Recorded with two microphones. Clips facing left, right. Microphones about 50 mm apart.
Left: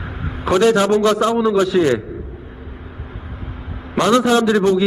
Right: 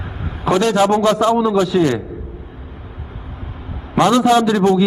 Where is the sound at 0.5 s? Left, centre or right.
Centre.